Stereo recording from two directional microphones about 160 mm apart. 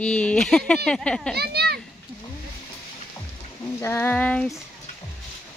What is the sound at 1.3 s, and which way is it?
Children playing, 85° right.